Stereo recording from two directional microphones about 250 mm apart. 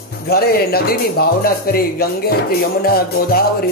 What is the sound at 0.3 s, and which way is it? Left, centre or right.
Speech, left.